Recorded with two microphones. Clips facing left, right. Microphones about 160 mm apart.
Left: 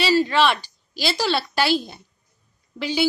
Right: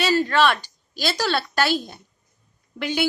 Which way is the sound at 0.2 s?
10° left (ahead or behind).